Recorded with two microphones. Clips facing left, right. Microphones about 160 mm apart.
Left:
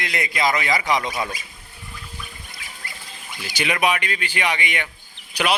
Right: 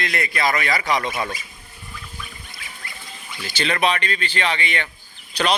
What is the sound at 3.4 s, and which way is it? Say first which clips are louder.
A man's voice: right 1 dB; 10° left (ahead or behind).